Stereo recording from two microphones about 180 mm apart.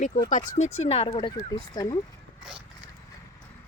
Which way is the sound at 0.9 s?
30° left (ahead or behind).